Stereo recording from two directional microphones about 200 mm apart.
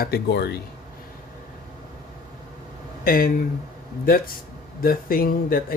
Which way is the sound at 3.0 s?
45° left (ahead or behind).